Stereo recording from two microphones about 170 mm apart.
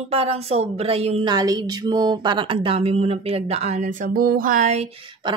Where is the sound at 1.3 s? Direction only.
20° right (ahead or behind).